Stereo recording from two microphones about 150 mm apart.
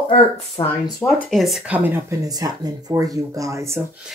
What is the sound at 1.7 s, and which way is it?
Speech, 15° right (ahead or behind).